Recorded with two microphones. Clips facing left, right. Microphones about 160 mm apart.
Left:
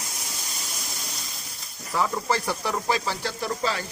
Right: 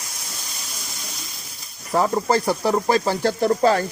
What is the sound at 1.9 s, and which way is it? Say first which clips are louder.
Speech: right 6 dB; 45° right (ahead or behind).